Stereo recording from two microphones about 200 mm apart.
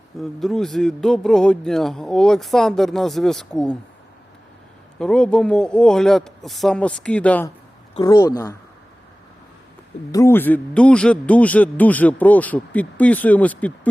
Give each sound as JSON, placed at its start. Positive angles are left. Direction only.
{"t": 0.2, "sound": "speech", "side_deg": 0}
{"t": 4.9, "sound": "speech", "side_deg": 5}
{"t": 7.9, "sound": "speech", "side_deg": 20}
{"t": 10.1, "sound": "a man's voice", "side_deg": 15}